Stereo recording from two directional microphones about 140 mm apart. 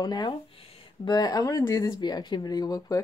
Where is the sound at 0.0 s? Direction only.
30° left (ahead or behind).